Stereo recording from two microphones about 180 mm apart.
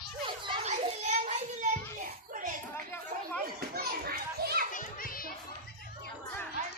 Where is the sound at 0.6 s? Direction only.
40° right (ahead or behind).